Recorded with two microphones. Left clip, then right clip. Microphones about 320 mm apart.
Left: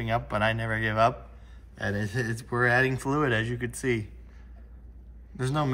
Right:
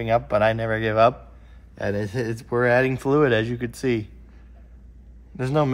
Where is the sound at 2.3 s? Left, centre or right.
Right.